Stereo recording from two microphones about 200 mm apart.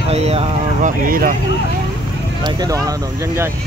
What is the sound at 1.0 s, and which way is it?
Speech, 45° right (ahead or behind).